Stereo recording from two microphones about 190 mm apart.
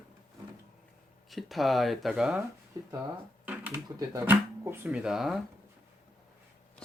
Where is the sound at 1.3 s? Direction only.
Centre (ahead or behind).